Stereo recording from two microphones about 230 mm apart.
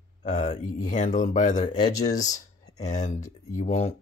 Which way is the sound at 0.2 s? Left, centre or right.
Left.